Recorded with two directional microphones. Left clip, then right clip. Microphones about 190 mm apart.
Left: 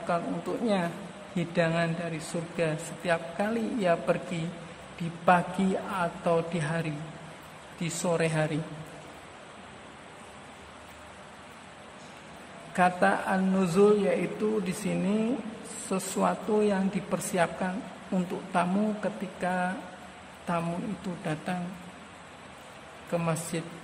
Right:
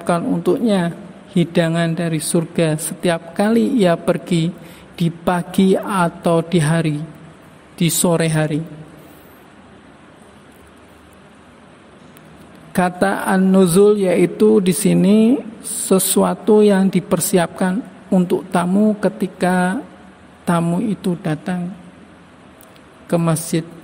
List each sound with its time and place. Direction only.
0.0 s a woman's voice: 35° right (ahead or behind)
5.2 s a man's voice: 45° right (ahead or behind)
12.7 s a man's voice: 45° right (ahead or behind)
23.1 s a woman's voice: 35° right (ahead or behind)